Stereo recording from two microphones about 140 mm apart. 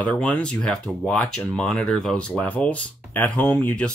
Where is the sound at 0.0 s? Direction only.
10° left (ahead or behind).